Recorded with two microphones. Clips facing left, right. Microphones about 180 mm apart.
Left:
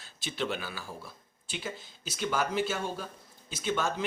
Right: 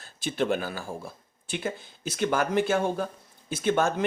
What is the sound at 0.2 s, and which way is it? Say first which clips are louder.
Speech: right 7 dB; 50° right (ahead or behind).